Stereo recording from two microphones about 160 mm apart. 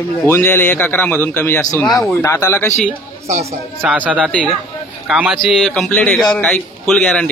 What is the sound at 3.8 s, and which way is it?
A man's voice, 10° right (ahead or behind).